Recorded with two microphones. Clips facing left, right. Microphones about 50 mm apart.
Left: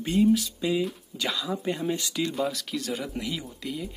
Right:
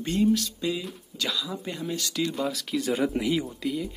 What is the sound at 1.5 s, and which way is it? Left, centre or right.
Speech, centre.